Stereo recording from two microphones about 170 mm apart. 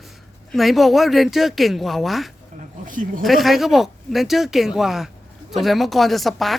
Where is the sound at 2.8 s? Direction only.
50° right (ahead or behind).